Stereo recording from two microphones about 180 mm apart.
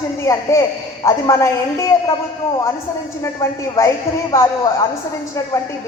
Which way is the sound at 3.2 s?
15° left (ahead or behind).